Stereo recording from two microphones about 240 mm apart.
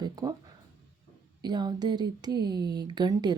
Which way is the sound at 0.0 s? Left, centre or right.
Centre.